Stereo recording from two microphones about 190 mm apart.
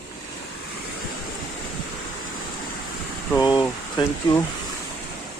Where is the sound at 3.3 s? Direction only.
20° left (ahead or behind).